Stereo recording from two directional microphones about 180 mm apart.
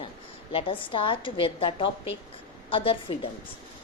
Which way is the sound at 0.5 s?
30° left (ahead or behind).